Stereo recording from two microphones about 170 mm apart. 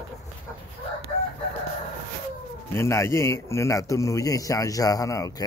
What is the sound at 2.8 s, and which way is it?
A man's voice, 15° left (ahead or behind).